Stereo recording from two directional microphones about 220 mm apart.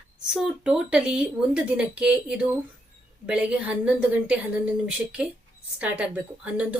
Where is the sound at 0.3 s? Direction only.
5° right (ahead or behind).